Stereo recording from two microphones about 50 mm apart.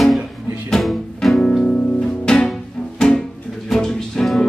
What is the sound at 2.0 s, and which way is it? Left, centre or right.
Music, centre.